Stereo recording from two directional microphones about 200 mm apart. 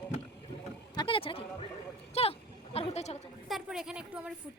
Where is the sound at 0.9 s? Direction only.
25° left (ahead or behind).